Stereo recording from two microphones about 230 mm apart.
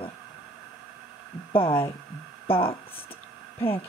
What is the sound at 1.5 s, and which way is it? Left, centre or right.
Speech, left.